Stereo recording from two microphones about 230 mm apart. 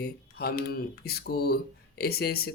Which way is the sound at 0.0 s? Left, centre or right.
Left.